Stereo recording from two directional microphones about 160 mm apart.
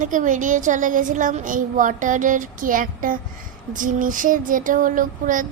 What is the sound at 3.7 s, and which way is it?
Child singing, 55° right (ahead or behind).